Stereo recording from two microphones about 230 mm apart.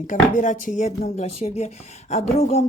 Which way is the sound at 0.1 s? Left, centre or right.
Left.